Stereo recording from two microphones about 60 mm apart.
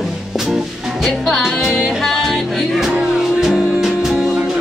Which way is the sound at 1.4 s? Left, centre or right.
Centre.